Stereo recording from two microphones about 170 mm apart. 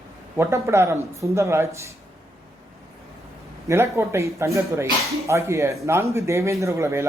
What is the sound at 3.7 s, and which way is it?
Speech, 15° right (ahead or behind).